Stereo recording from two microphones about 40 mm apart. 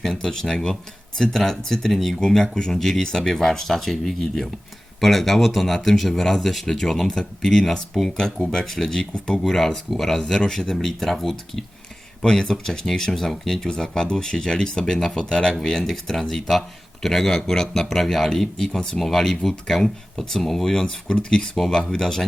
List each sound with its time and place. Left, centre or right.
0.0 s speech: centre
21.1 s speech: left